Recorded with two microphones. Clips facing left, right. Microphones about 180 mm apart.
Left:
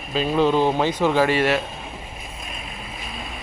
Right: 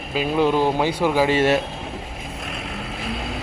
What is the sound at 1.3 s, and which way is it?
Speech, 25° right (ahead or behind).